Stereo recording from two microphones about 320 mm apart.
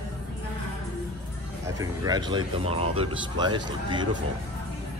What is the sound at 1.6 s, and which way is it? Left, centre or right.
Speech, centre.